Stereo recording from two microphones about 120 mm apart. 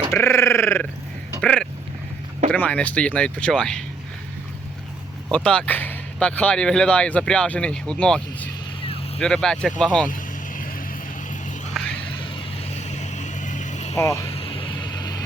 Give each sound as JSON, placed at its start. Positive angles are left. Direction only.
{"t": 0.1, "sound": "a sound", "side_deg": 25}
{"t": 1.4, "sound": "speech", "side_deg": 10}
{"t": 5.3, "sound": "speech", "side_deg": 10}
{"t": 11.8, "sound": "a sound", "side_deg": 5}
{"t": 12.6, "sound": "vehicle", "side_deg": 65}
{"t": 14.0, "sound": "speech", "side_deg": 25}
{"t": 14.3, "sound": "vehicle", "side_deg": 55}